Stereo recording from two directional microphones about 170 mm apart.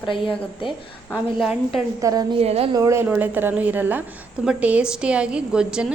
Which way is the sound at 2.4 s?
35° right (ahead or behind).